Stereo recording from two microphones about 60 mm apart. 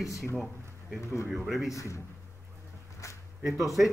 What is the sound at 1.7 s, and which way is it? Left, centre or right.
Speech, left.